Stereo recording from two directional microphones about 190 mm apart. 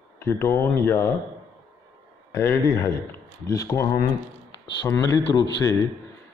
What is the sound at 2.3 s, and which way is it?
A man's voice, 15° left (ahead or behind).